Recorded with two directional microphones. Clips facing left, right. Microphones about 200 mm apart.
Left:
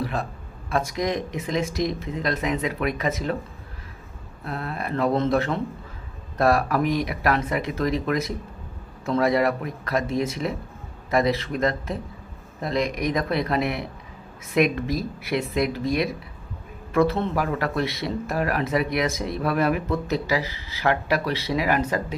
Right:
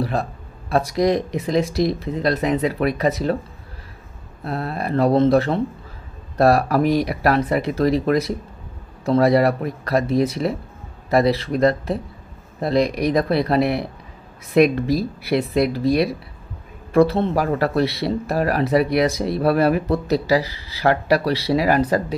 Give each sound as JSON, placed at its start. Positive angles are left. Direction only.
{"t": 0.0, "sound": "speech", "side_deg": -35}
{"t": 4.5, "sound": "speech", "side_deg": -35}